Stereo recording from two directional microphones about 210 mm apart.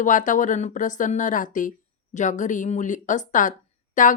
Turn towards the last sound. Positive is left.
turn(degrees=35)  # may be behind; listen again after turning